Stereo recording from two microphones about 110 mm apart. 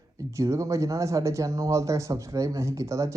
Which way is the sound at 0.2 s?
30° right (ahead or behind).